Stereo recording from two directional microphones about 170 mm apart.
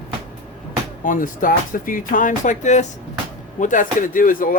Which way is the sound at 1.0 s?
50° left (ahead or behind).